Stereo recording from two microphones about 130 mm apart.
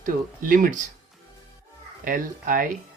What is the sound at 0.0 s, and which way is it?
Speech, 90° right.